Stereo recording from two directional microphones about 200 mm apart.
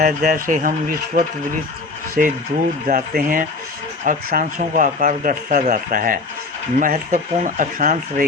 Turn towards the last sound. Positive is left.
turn(degrees=-40)  # may be behind; listen again after turning